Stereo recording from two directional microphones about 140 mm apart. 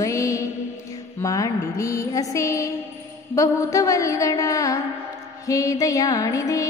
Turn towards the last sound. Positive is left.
turn(degrees=25)  # may be behind; listen again after turning